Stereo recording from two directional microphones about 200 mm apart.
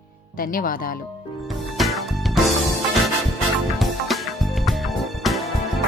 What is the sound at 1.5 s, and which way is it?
Music, centre (ahead or behind).